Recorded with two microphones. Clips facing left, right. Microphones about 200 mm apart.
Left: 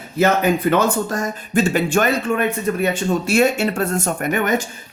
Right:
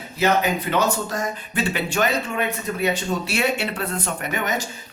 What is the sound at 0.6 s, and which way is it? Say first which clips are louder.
Speech: left 5 dB; 50° left (ahead or behind).